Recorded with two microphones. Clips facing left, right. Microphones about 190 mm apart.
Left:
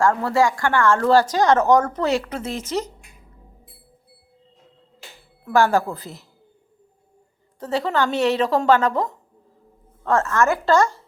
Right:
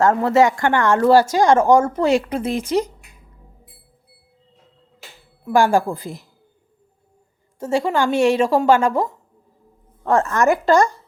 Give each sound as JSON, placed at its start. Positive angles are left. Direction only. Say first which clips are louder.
{"t": 0.0, "sound": "speech", "louder": "right 4 dB", "side_deg": -20}
{"t": 5.5, "sound": "speech", "louder": "right 2 dB", "side_deg": -10}
{"t": 7.6, "sound": "speech", "louder": "right 3 dB", "side_deg": -10}